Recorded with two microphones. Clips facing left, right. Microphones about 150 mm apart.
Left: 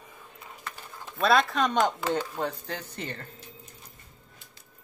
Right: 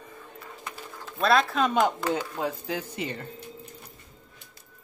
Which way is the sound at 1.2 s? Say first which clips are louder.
Right 1 dB; centre (ahead or behind).